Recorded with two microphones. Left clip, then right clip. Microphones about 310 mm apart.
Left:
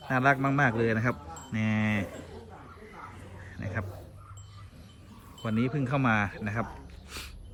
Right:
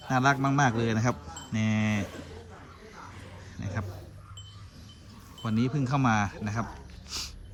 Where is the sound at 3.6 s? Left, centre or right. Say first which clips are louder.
Left 2 dB; centre.